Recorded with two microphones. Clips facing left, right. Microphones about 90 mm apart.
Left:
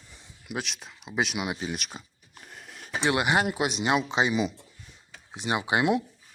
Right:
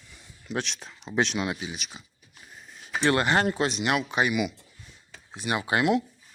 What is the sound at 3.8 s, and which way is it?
Speech, 20° left (ahead or behind).